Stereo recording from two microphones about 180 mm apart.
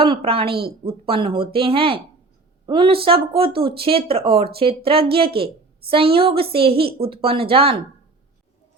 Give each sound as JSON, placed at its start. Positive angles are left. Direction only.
{"t": 0.0, "sound": "a woman's voice", "side_deg": -30}